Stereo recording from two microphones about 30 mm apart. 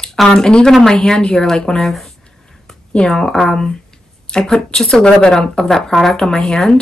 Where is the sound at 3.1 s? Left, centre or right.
Centre.